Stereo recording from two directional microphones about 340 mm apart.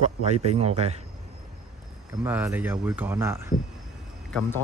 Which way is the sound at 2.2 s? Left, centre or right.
Centre.